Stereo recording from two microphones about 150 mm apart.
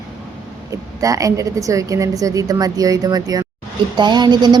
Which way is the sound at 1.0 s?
20° right (ahead or behind).